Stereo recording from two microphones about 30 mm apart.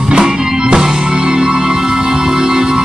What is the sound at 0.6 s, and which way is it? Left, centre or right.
Music, right.